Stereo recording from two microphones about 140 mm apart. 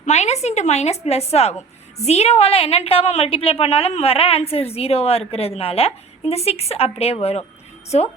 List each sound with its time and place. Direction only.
0.0 s a woman's voice: 55° left (ahead or behind)